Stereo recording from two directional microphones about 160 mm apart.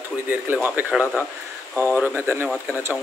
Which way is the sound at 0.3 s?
10° right (ahead or behind).